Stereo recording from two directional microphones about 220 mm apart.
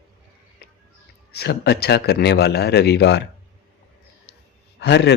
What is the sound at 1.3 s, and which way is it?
A man's voice, 50° left (ahead or behind).